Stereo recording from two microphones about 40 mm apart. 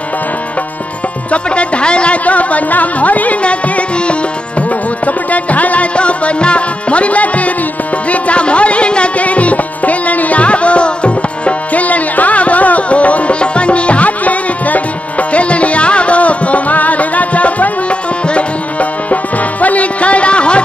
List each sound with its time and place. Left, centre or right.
1.3 s speech: left
2.2 s music: left
5.9 s music: left